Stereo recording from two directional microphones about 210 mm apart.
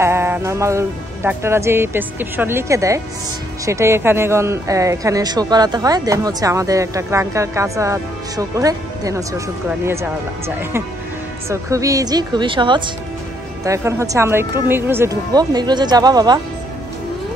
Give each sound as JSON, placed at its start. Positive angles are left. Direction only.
{"t": 0.0, "sound": "speech", "side_deg": -10}
{"t": 11.4, "sound": "speech", "side_deg": -15}